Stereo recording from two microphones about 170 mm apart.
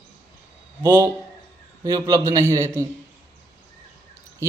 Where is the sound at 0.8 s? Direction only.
15° right (ahead or behind).